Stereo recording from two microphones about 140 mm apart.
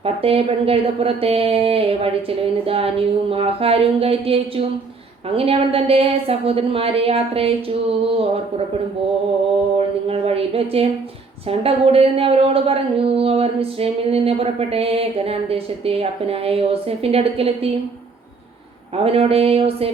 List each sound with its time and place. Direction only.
0.0 s a woman's voice: 45° right (ahead or behind)
9.7 s a woman's voice: 45° right (ahead or behind)
19.0 s a woman's voice: 45° right (ahead or behind)